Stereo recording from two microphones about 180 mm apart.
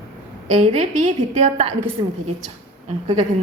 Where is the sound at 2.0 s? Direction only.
25° right (ahead or behind).